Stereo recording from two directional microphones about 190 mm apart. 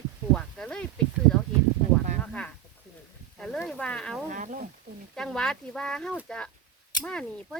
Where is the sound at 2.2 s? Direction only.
5° left (ahead or behind).